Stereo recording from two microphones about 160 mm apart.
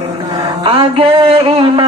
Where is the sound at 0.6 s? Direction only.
35° right (ahead or behind).